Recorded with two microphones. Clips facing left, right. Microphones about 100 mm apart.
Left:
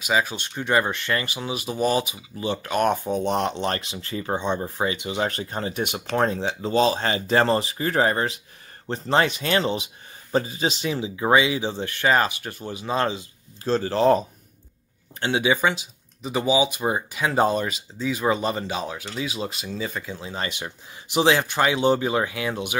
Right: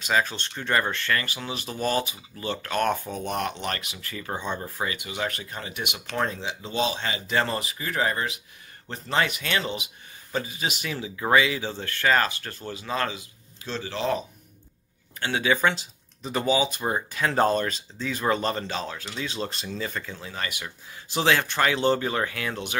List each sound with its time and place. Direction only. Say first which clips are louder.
0.0 s speech: left 1 dB; 10° left (ahead or behind); by 13.3 s 25° left (ahead or behind)
13.7 s speech: left 9 dB; 40° left (ahead or behind)
15.1 s speech: left 3 dB; 20° left (ahead or behind)